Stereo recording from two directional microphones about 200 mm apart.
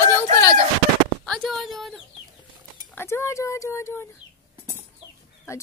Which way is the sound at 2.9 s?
10° left (ahead or behind).